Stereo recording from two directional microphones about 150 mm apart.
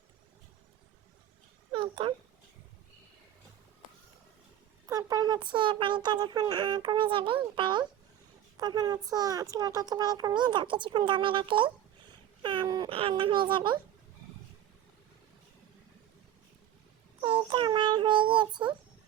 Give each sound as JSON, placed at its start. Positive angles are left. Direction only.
{"t": 1.7, "sound": "babbling", "side_deg": -35}
{"t": 4.9, "sound": "a child's voice", "side_deg": -25}
{"t": 12.9, "sound": "a woman's voice", "side_deg": -40}
{"t": 17.2, "sound": "child singing", "side_deg": -35}